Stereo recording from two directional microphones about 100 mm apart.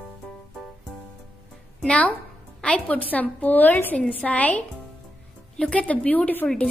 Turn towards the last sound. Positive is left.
turn(degrees=15)  # may be behind; listen again after turning